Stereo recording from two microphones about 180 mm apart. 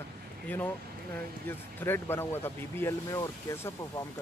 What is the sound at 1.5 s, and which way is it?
Speech, 10° left (ahead or behind).